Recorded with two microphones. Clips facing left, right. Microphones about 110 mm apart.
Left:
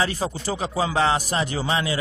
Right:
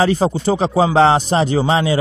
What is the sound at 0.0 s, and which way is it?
A man's voice, 30° right (ahead or behind).